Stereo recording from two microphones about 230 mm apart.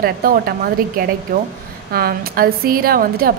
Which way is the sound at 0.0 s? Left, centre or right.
Right.